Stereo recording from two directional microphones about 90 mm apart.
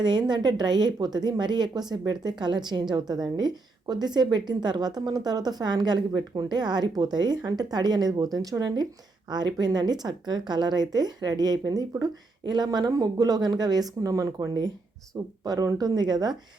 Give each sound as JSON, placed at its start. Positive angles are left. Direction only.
{"t": 0.0, "sound": "a woman's voice", "side_deg": -55}